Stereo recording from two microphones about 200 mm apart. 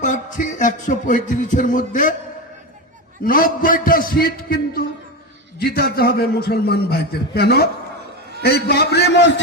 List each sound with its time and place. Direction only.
0.0 s music: 40° left (ahead or behind)
3.2 s a man's voice: 45° left (ahead or behind); by 9.3 s 60° left (ahead or behind)